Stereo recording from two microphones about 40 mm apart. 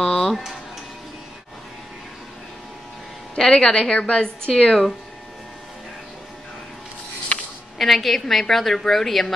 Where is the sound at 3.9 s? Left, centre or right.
Left.